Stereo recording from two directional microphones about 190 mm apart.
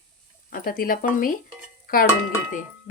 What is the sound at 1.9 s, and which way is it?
Dishes, 50° left (ahead or behind).